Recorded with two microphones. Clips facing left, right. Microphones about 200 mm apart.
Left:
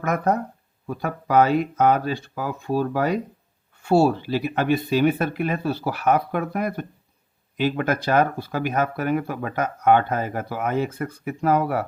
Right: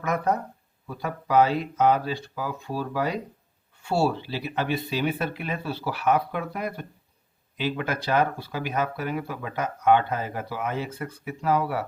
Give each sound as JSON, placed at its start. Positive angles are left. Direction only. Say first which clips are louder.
{"t": 0.0, "sound": "speech", "louder": "left 3 dB", "side_deg": 50}